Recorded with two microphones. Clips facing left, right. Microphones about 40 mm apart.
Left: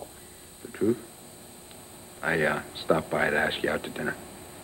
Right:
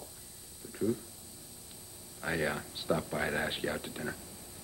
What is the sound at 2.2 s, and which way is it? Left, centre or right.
A woman's voice, left.